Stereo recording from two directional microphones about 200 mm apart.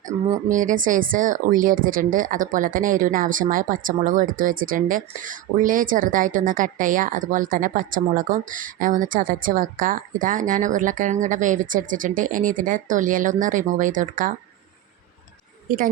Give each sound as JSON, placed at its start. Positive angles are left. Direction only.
{"t": 0.1, "sound": "speech", "side_deg": -20}
{"t": 0.4, "sound": "speech", "side_deg": -40}